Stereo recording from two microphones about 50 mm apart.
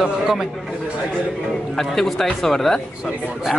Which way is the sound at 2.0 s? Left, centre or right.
Centre.